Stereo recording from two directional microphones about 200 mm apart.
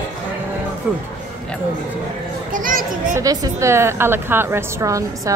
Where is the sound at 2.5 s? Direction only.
45° right (ahead or behind).